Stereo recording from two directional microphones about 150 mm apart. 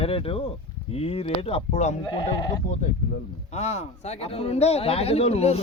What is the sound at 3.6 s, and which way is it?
A man's voice, 45° left (ahead or behind).